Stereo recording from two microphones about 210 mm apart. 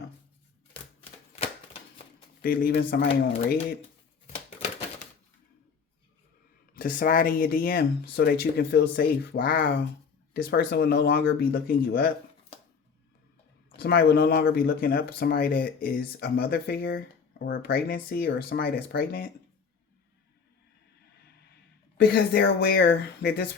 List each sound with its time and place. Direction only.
2.4 s speech: 45° left (ahead or behind)
6.7 s speech: 40° left (ahead or behind)
13.7 s speech: 45° left (ahead or behind)
22.0 s speech: 50° left (ahead or behind)